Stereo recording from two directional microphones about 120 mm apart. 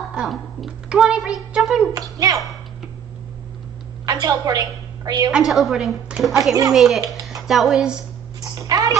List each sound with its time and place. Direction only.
0.1 s a woman's voice: 5° right (ahead or behind)
2.0 s a child's voice: 30° right (ahead or behind)
4.0 s a woman's voice: 30° right (ahead or behind)
5.3 s a woman's voice: centre (ahead or behind)
8.4 s speech: 30° right (ahead or behind)